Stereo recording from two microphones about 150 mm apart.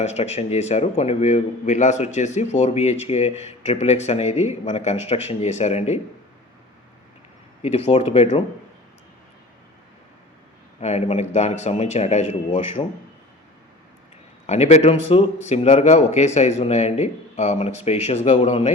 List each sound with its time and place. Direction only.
0.0 s a man's voice: 45° left (ahead or behind)
7.6 s a man's voice: 45° left (ahead or behind)
10.8 s a man's voice: 45° left (ahead or behind)
12.8 s a man's voice: 35° left (ahead or behind)
14.4 s a man's voice: 50° left (ahead or behind)